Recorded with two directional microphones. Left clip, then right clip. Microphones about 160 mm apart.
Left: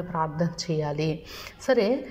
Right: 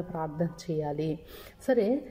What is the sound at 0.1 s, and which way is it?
A woman's voice, 40° right (ahead or behind).